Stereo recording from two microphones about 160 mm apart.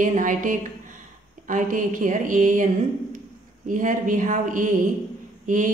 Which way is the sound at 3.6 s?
55° right (ahead or behind).